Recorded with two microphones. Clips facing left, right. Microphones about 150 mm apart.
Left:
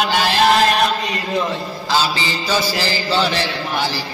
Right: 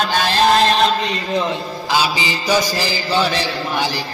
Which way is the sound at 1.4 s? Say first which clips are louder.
Even; 15° right (ahead or behind).